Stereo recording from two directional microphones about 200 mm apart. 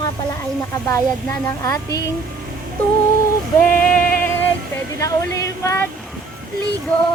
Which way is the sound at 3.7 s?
45° left (ahead or behind).